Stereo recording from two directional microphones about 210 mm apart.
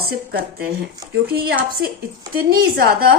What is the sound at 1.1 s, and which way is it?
Speech, 50° right (ahead or behind).